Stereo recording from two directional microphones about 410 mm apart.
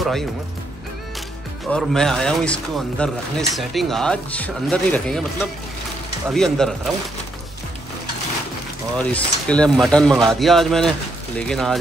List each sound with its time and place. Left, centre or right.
1.7 s speech: centre
8.9 s speech: centre